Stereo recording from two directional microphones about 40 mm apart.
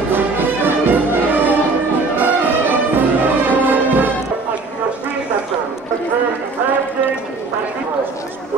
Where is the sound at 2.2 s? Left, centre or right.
Right.